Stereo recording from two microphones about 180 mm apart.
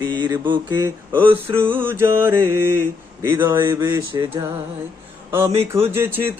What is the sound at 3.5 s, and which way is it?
Mantra, 25° right (ahead or behind).